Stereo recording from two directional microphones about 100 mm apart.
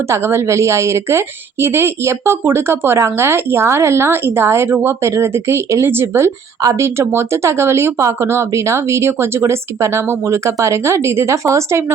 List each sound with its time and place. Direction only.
0.1 s a woman's voice: 25° right (ahead or behind)